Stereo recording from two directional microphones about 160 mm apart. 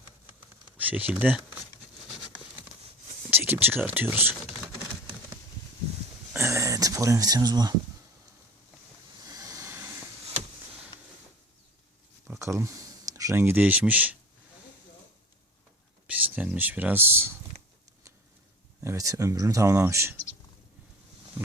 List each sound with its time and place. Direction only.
0.8 s speech: 10° right (ahead or behind)
3.2 s speech: 15° right (ahead or behind)
6.3 s a sound: 15° right (ahead or behind)
9.2 s a sound: 20° right (ahead or behind)
12.3 s speech: 15° right (ahead or behind)
16.0 s speech: 10° right (ahead or behind)
18.8 s speech: 20° right (ahead or behind)